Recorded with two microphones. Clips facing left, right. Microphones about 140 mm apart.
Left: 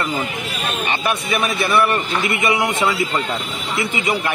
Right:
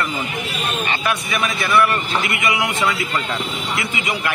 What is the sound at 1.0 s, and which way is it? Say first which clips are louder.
A man's voice: left 3 dB; 25° left (ahead or behind).